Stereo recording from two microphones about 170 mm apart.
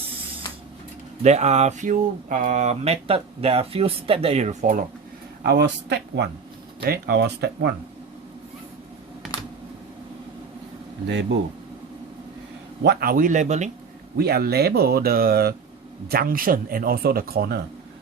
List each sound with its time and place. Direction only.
1.2 s speech: 40° right (ahead or behind)
5.5 s speech: 80° right
6.8 s speech: 65° right (ahead or behind)
11.1 s speech: 90° right
12.8 s speech: 65° right (ahead or behind); by 13.7 s 45° right (ahead or behind)
14.2 s speech: 65° right (ahead or behind)